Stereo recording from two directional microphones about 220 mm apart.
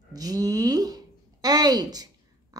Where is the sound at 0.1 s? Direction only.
15° right (ahead or behind).